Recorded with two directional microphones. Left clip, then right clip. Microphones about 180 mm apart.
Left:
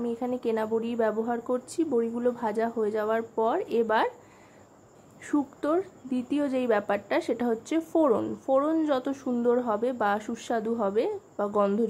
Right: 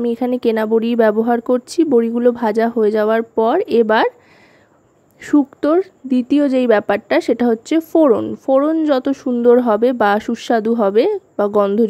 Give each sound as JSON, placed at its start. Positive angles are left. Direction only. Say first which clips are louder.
{"t": 0.0, "sound": "a woman's voice", "louder": "right 12 dB", "side_deg": -50}
{"t": 5.2, "sound": "a woman's voice", "louder": "right 13 dB", "side_deg": -40}